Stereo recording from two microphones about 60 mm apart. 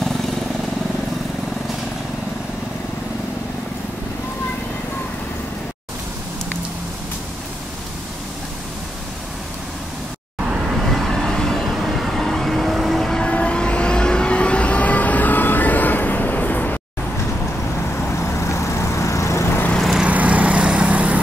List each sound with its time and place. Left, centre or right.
10.9 s vehicle: centre
13.2 s vehicle: centre
18.0 s vehicle: left
20.1 s vehicle: right